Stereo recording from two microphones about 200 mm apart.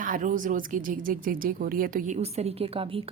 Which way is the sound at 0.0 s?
40° right (ahead or behind).